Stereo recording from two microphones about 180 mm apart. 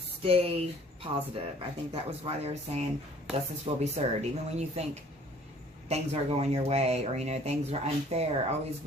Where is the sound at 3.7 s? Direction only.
35° right (ahead or behind).